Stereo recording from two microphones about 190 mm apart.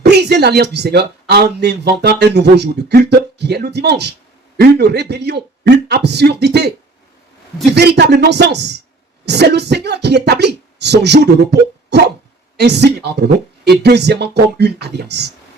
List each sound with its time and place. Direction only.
0.0 s a woman's voice: 60° right (ahead or behind)
7.8 s speech: 60° right (ahead or behind)
11.9 s a sound: 60° right (ahead or behind)
12.5 s speech: 60° right (ahead or behind)